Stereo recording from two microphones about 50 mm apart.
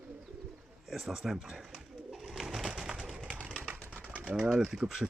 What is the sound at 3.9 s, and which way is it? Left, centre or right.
Bird, right.